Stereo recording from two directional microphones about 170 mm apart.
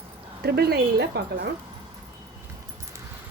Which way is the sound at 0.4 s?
70° right (ahead or behind).